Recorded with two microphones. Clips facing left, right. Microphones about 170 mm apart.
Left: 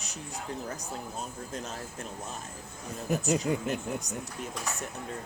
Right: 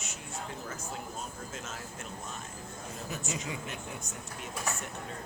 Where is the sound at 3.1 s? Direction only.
40° left (ahead or behind).